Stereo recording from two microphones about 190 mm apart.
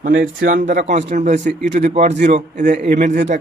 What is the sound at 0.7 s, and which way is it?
A man's voice, 40° right (ahead or behind).